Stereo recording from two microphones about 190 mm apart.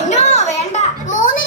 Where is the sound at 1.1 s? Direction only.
45° left (ahead or behind).